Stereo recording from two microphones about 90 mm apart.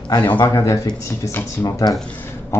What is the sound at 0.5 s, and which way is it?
Speech, 30° left (ahead or behind).